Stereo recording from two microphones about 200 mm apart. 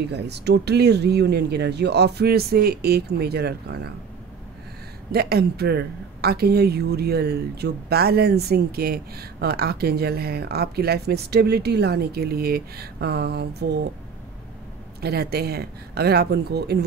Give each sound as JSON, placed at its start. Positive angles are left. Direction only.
{"t": 0.1, "sound": "speech", "side_deg": -55}
{"t": 5.1, "sound": "speech", "side_deg": -50}
{"t": 15.0, "sound": "speech", "side_deg": -50}